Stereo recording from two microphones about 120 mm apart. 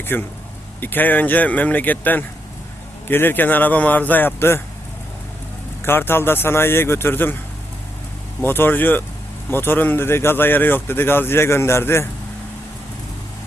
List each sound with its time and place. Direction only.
0.0 s speech: 20° left (ahead or behind)
5.8 s speech: 20° left (ahead or behind)
8.4 s speech: 20° left (ahead or behind)